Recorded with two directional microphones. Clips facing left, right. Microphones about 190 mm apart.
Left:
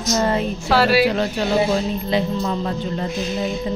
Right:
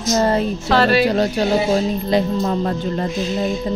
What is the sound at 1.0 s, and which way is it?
Speech, 40° right (ahead or behind).